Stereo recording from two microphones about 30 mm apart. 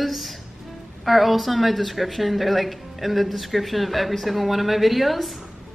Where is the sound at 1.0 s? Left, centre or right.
Centre.